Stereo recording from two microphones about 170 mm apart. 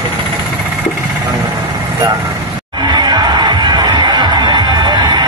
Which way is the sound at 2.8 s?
25° right (ahead or behind).